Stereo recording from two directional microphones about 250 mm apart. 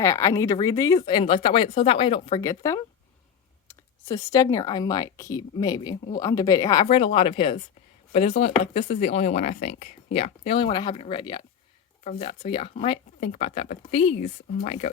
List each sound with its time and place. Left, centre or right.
0.0 s speech: centre
4.1 s speech: centre; by 14.8 s left